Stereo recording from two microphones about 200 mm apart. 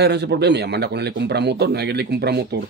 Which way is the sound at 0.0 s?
55° right (ahead or behind).